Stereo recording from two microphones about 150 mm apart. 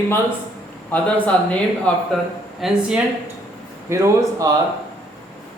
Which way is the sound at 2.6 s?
Centre (ahead or behind).